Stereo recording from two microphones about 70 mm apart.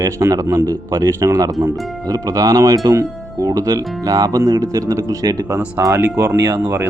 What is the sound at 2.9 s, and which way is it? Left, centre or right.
Speech, right.